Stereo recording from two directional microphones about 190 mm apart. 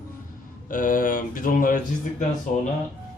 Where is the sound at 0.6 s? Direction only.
45° left (ahead or behind).